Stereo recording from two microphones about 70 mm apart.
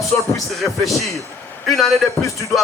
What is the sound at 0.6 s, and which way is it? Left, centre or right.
Speech, centre.